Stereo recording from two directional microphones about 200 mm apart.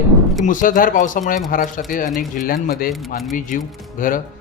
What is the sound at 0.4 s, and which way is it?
Speech, 40° left (ahead or behind).